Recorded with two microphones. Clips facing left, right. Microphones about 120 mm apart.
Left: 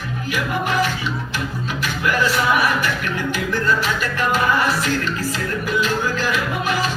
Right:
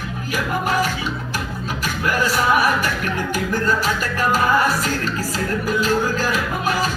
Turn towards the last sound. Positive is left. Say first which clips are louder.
# even
turn(degrees=-40)  # may be behind; listen again after turning